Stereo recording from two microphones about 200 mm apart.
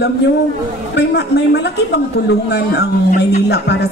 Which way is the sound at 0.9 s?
55° left (ahead or behind).